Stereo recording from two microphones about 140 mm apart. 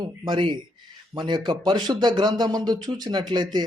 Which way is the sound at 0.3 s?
35° right (ahead or behind).